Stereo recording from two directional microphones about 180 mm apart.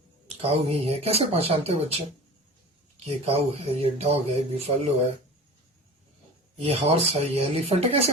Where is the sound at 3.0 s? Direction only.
35° right (ahead or behind).